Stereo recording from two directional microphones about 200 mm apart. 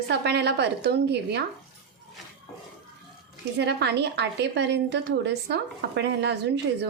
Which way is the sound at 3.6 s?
55° right (ahead or behind).